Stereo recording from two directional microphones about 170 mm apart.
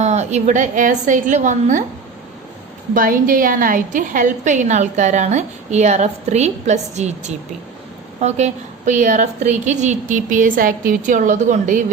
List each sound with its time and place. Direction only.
0.0 s a woman's voice: 40° right (ahead or behind)
2.9 s a woman's voice: 55° right (ahead or behind)